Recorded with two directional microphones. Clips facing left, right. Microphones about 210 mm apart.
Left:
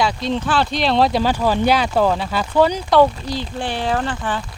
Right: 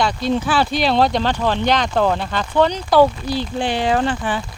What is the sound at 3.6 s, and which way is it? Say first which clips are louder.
Speech: right 3 dB; 15° right (ahead or behind).